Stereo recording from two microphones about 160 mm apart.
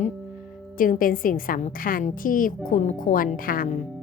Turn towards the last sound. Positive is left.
turn(degrees=60)  # may be behind; listen again after turning